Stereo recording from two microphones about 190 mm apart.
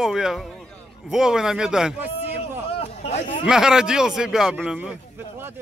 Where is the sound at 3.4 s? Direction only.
5° right (ahead or behind).